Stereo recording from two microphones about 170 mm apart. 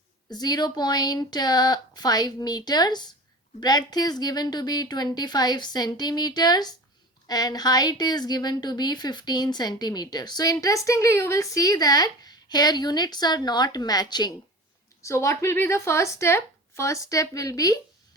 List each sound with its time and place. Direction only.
0.3 s a woman's voice: 25° left (ahead or behind)